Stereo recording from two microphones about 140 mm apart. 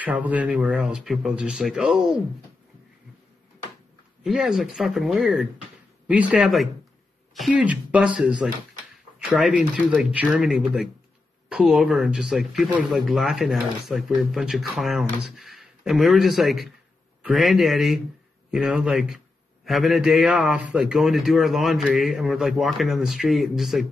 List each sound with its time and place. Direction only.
0.0 s speech: 10° right (ahead or behind)
4.2 s a man's voice: 5° right (ahead or behind)